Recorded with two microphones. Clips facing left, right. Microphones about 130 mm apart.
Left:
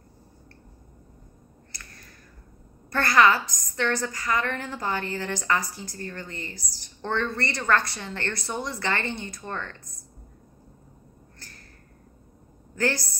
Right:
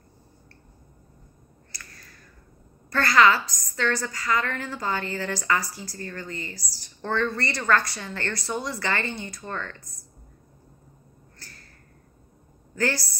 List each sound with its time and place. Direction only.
2.9 s a woman's voice: 15° left (ahead or behind)